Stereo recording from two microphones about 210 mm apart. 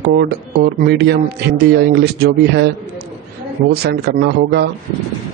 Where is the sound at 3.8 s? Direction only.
50° right (ahead or behind).